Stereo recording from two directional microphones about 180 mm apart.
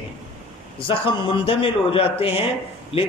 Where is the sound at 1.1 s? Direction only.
30° left (ahead or behind).